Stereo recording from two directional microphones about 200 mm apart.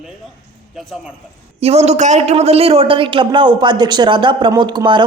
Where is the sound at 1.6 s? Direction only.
30° right (ahead or behind).